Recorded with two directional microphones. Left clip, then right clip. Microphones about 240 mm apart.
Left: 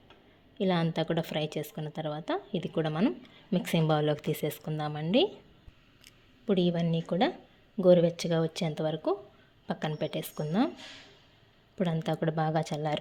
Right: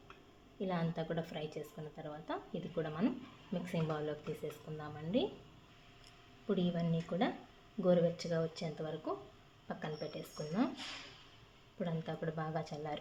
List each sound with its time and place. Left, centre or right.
0.6 s speech: left
11.8 s speech: left